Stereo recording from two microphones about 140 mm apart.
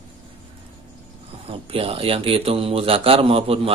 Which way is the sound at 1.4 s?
45° right (ahead or behind).